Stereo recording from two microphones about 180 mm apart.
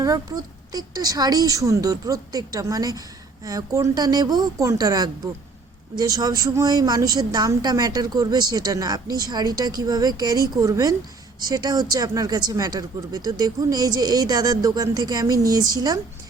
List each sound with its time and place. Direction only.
0.0 s a woman's voice: 20° right (ahead or behind)